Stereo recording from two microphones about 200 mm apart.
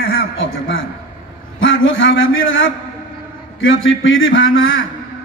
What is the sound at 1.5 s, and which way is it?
A man's voice, 80° left.